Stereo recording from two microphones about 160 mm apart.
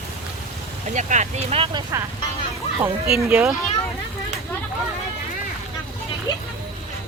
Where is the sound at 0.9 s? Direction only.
50° right (ahead or behind).